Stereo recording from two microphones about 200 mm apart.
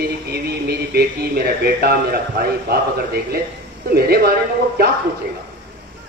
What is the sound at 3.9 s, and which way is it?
Speech, 50° right (ahead or behind).